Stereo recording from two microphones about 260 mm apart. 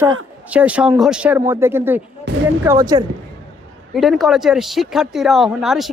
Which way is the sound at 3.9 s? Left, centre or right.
Centre.